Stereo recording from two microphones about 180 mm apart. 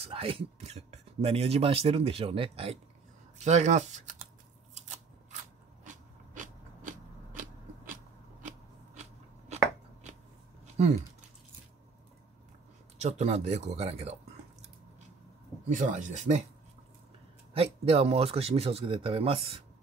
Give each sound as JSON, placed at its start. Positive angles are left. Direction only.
{"t": 0.0, "sound": "speech", "side_deg": -30}
{"t": 5.9, "sound": "a sound", "side_deg": -45}
{"t": 10.8, "sound": "speech", "side_deg": -40}
{"t": 13.0, "sound": "speech", "side_deg": -40}
{"t": 15.7, "sound": "speech", "side_deg": -45}
{"t": 17.6, "sound": "speech", "side_deg": -35}